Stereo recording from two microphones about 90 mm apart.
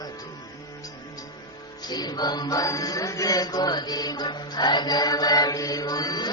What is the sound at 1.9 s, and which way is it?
Mantra, 50° left (ahead or behind).